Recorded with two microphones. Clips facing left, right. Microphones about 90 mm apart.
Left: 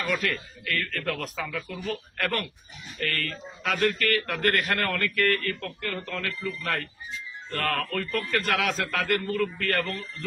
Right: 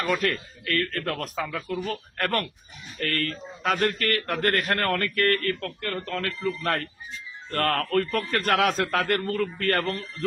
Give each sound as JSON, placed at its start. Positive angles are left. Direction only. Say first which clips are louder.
{"t": 0.1, "sound": "a man's voice", "louder": "right 3 dB", "side_deg": -45}